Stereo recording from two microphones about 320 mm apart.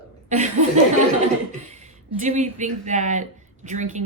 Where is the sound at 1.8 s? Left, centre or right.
Right.